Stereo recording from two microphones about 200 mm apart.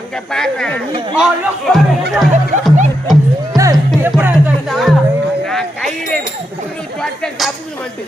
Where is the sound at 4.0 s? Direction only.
10° right (ahead or behind).